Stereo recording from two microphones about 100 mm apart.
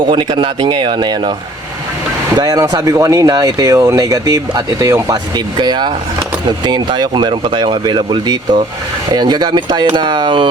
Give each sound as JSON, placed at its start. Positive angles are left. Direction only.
{"t": 0.1, "sound": "speech", "side_deg": -55}
{"t": 2.3, "sound": "speech", "side_deg": -40}
{"t": 5.1, "sound": "speech", "side_deg": -50}